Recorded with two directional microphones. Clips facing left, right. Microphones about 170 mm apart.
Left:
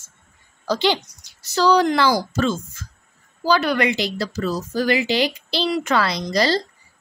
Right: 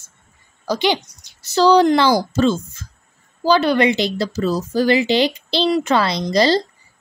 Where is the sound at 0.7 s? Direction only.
15° right (ahead or behind).